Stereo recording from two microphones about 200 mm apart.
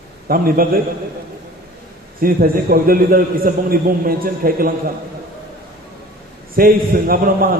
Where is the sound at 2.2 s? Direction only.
45° right (ahead or behind).